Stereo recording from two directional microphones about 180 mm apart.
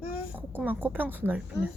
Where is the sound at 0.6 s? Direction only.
10° right (ahead or behind).